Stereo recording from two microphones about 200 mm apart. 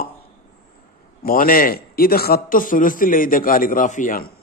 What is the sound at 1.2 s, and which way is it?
A man's voice, 45° left (ahead or behind).